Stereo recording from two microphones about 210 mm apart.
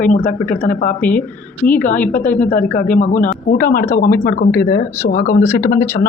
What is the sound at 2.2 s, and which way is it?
Speech, 10° left (ahead or behind).